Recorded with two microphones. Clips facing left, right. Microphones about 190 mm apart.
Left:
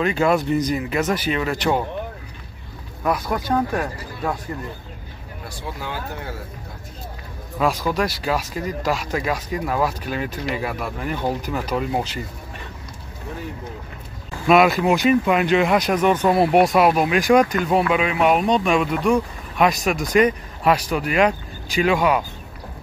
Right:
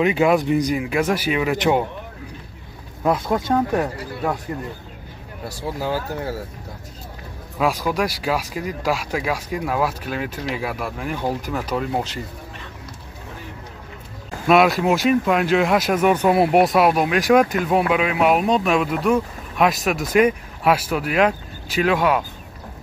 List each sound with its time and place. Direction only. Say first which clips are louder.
0.0 s speech: right 2 dB; 15° right (ahead or behind)
3.0 s speech: right 3 dB; 25° right (ahead or behind)
5.5 s speech: right 7 dB; 35° right (ahead or behind)
7.5 s speech: even; 5° right (ahead or behind)
14.5 s speech: even; centre (ahead or behind)